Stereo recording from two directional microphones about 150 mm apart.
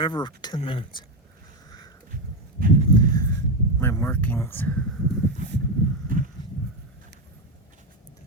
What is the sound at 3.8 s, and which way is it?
Speech, 15° left (ahead or behind).